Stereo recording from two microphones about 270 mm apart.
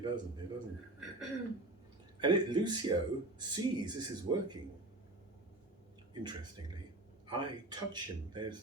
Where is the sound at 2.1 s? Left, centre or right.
Centre.